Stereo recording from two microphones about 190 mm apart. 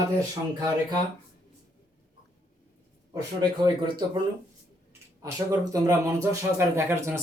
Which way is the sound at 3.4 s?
20° right (ahead or behind).